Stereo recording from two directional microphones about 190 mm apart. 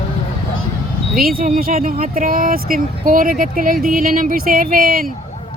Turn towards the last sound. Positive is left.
turn(degrees=-50)  # may be behind; listen again after turning